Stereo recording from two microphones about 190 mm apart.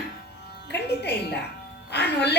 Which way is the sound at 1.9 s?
60° left (ahead or behind).